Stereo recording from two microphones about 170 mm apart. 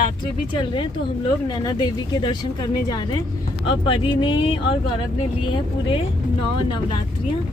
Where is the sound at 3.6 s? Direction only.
30° left (ahead or behind).